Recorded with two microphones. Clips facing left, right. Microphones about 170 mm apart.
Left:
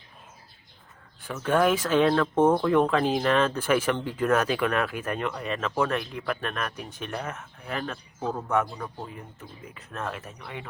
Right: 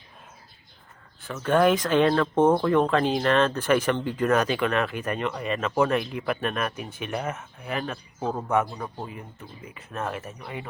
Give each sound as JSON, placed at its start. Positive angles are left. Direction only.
{"t": 1.3, "sound": "speech", "side_deg": 5}
{"t": 2.5, "sound": "speech", "side_deg": -10}
{"t": 2.7, "sound": "speech", "side_deg": 5}
{"t": 8.2, "sound": "speech", "side_deg": -20}
{"t": 8.4, "sound": "speech", "side_deg": -5}